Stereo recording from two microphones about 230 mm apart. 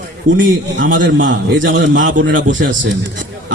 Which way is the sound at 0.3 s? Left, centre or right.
Right.